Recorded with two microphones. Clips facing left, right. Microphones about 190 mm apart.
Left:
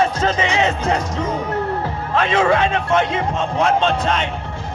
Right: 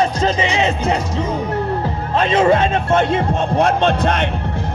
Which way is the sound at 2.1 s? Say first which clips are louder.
Right 2 dB; 40° right (ahead or behind).